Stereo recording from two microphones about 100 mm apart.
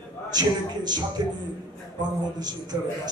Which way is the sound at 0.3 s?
45° right (ahead or behind).